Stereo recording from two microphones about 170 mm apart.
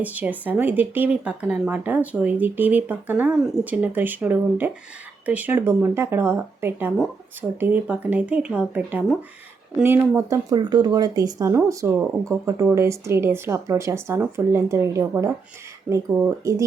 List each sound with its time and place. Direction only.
0.0 s speech: 10° right (ahead or behind)